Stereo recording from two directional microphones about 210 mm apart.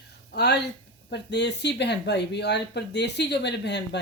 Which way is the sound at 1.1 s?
55° left (ahead or behind).